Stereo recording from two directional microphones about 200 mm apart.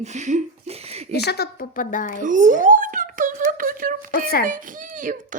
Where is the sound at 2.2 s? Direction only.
40° right (ahead or behind).